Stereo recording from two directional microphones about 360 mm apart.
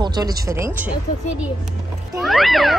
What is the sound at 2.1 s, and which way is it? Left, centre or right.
Speech, centre.